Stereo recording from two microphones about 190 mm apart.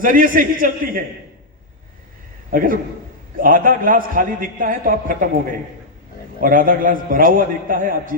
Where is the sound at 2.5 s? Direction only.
45° right (ahead or behind).